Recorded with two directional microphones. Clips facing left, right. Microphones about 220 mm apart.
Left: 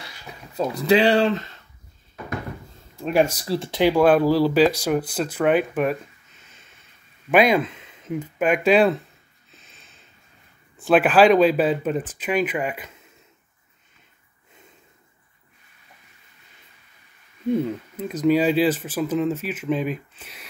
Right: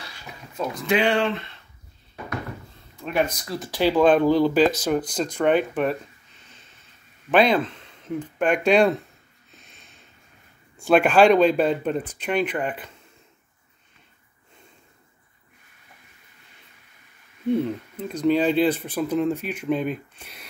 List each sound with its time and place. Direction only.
0.6 s speech: 35° left (ahead or behind)
3.0 s speech: 35° left (ahead or behind)
3.8 s speech: 10° left (ahead or behind)
7.2 s speech: 10° left (ahead or behind)
9.5 s a sound: centre (ahead or behind)
10.8 s speech: 5° left (ahead or behind)
17.6 s speech: 5° left (ahead or behind)